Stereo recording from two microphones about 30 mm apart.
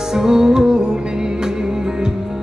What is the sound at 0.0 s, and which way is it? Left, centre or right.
Music, centre.